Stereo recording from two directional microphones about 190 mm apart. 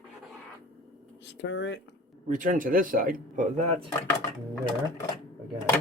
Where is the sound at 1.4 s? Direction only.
70° left (ahead or behind).